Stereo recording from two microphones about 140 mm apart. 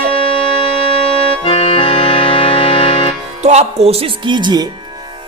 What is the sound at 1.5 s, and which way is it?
Music, 40° left (ahead or behind).